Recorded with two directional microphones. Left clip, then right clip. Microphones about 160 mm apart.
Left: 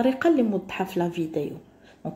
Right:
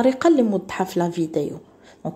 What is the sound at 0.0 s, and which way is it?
A woman's voice, 35° right (ahead or behind).